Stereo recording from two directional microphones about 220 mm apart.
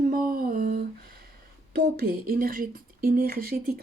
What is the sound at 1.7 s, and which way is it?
Speech, 45° right (ahead or behind).